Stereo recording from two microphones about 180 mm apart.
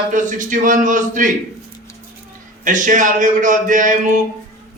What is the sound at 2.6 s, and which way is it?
A man's voice, 45° right (ahead or behind).